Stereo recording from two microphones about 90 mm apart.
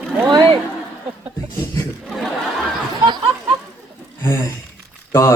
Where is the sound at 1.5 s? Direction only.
35° left (ahead or behind).